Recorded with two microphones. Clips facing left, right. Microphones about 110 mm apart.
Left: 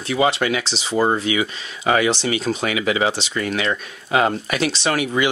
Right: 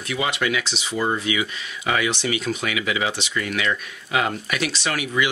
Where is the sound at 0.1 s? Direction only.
30° left (ahead or behind).